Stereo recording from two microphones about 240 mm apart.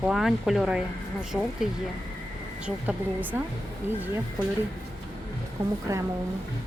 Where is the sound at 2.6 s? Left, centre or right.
Centre.